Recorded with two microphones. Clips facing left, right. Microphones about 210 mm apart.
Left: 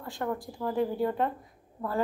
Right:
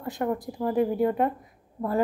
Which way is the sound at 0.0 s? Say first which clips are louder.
Right 5 dB; 20° right (ahead or behind).